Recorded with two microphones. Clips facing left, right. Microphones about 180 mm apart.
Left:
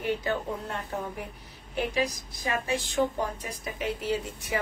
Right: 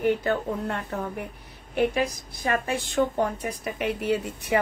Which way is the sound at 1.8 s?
55° right (ahead or behind).